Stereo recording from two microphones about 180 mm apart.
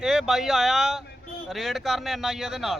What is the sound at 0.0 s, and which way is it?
A man's voice, 5° right (ahead or behind).